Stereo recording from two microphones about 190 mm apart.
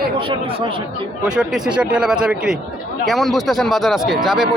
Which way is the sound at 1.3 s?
5° right (ahead or behind).